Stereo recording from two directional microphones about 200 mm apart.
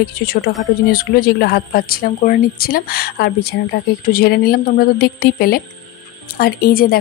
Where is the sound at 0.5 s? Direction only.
50° left (ahead or behind).